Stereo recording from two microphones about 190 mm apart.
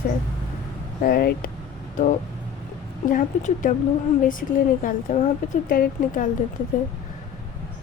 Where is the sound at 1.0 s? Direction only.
50° left (ahead or behind).